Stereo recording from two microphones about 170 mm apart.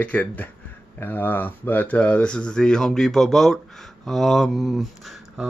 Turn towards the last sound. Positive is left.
turn(degrees=0)  # may be behind; listen again after turning